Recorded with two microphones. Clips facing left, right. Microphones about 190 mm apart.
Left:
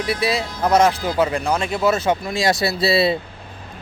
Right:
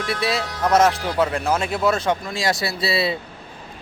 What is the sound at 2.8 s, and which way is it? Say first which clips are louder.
Speech: left 5 dB; 30° left (ahead or behind).